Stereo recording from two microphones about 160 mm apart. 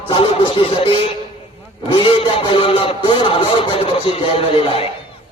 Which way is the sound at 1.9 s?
35° left (ahead or behind).